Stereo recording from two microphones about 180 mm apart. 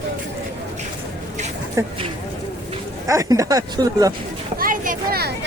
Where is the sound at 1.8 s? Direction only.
15° right (ahead or behind).